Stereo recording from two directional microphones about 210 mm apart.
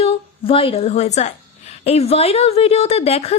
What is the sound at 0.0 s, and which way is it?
A woman's voice, 30° left (ahead or behind).